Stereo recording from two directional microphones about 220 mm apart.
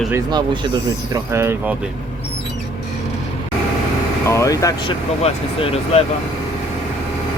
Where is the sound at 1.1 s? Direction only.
10° right (ahead or behind).